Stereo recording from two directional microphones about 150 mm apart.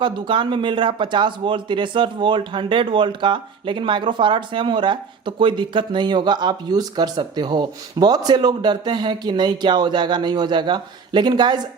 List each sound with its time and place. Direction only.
0.0 s speech: 35° right (ahead or behind)